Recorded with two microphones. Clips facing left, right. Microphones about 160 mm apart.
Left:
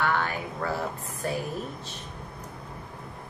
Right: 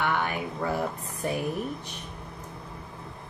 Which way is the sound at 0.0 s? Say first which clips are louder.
Even; 15° right (ahead or behind).